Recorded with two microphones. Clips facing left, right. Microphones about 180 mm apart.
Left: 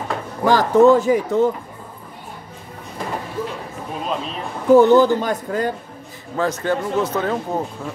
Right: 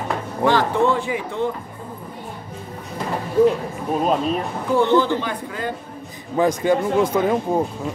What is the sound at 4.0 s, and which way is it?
Speech, 45° right (ahead or behind).